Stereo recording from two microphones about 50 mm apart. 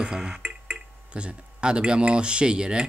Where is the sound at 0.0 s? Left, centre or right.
Centre.